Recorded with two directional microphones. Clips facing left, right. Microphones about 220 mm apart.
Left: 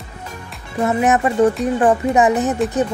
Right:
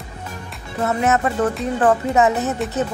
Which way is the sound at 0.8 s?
15° left (ahead or behind).